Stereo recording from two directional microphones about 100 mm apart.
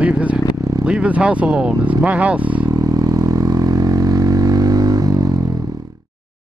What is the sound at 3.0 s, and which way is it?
Vehicle, 35° right (ahead or behind).